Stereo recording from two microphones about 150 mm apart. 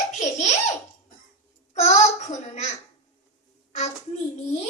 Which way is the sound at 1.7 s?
50° left (ahead or behind).